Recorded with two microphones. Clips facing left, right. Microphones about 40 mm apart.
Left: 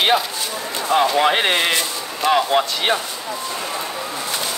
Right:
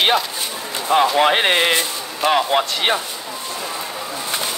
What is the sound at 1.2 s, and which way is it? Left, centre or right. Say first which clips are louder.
Speech: right 1 dB; right.